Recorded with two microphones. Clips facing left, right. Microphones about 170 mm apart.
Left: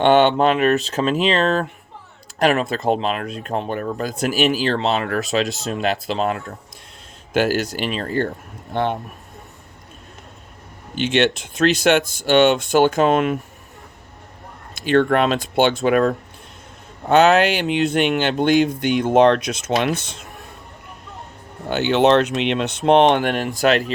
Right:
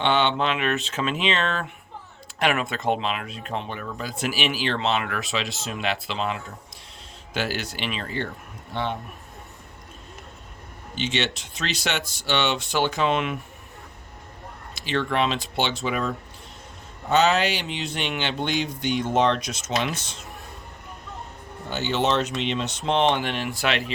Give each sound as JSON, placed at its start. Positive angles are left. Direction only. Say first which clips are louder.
{"t": 0.0, "sound": "speech", "louder": "left 8 dB", "side_deg": 50}
{"t": 10.9, "sound": "speech", "louder": "left 9 dB", "side_deg": 55}
{"t": 14.8, "sound": "speech", "louder": "left 8 dB", "side_deg": 50}
{"t": 21.7, "sound": "speech", "louder": "left 9 dB", "side_deg": 65}